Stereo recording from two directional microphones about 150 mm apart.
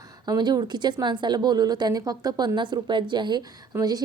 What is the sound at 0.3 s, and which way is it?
A woman's voice, 25° right (ahead or behind).